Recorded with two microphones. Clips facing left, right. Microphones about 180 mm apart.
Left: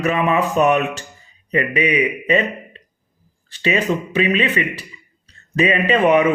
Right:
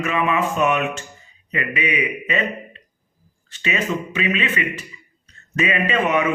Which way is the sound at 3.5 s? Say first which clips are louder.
Left 5 dB; 35° left (ahead or behind).